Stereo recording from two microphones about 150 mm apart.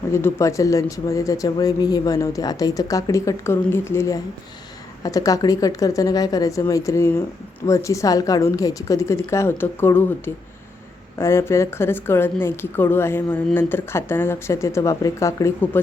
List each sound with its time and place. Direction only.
0.1 s speech: 15° left (ahead or behind)